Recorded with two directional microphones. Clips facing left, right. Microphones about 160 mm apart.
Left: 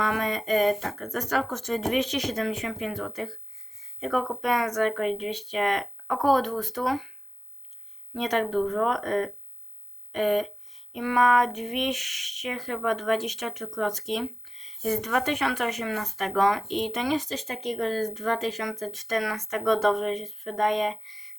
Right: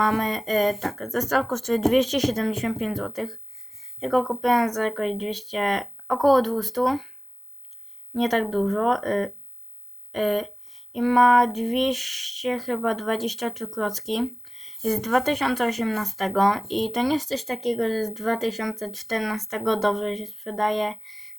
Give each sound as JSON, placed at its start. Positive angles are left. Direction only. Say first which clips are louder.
{"t": 0.0, "sound": "speech", "louder": "right 4 dB", "side_deg": -35}
{"t": 8.1, "sound": "speech", "louder": "right 3 dB", "side_deg": -40}